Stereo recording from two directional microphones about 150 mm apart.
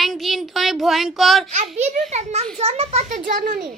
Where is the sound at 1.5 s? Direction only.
50° right (ahead or behind).